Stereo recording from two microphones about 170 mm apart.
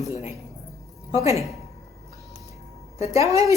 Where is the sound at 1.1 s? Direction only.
20° right (ahead or behind).